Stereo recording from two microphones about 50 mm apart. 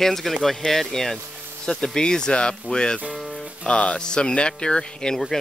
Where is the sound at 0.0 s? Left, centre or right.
Centre.